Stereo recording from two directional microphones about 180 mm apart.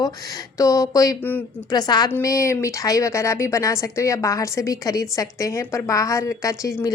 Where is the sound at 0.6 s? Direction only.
15° left (ahead or behind).